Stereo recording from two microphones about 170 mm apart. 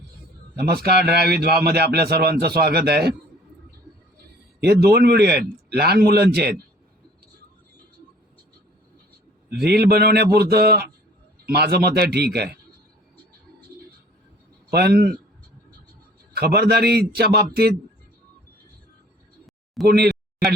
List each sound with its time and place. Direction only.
0.6 s a man's voice: 65° right (ahead or behind)
4.6 s a man's voice: 70° right (ahead or behind)
9.5 s a man's voice: 70° right (ahead or behind)
14.7 s a man's voice: 70° right (ahead or behind)
16.3 s a man's voice: 65° right (ahead or behind)
19.9 s a sound: 65° right (ahead or behind)